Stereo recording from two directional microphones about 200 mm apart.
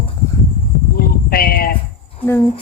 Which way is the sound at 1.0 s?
45° left (ahead or behind).